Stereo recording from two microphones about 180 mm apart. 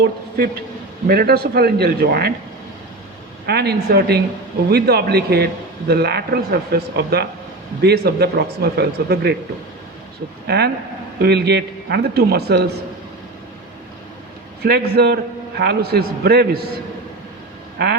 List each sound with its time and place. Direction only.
0.4 s a man's voice: 60° right (ahead or behind)
3.4 s a man's voice: 65° right (ahead or behind)
10.4 s a man's voice: 65° right (ahead or behind)
14.6 s a man's voice: 60° right (ahead or behind)